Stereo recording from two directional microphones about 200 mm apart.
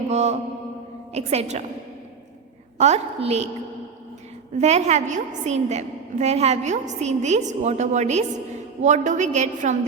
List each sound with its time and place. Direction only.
0.1 s a woman's voice: 35° right (ahead or behind)
2.7 s a woman's voice: 35° right (ahead or behind)
4.5 s a woman's voice: 35° right (ahead or behind)